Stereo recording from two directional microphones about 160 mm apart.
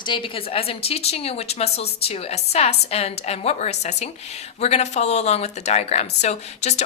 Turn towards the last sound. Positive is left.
turn(degrees=45)  # may be behind; listen again after turning